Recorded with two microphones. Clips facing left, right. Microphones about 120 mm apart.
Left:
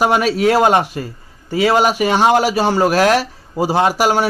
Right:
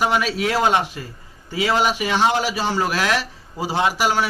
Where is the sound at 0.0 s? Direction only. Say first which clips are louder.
Left 6 dB; 45° left (ahead or behind).